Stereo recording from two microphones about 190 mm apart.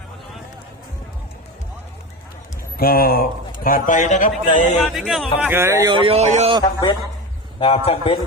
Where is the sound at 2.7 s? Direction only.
50° left (ahead or behind).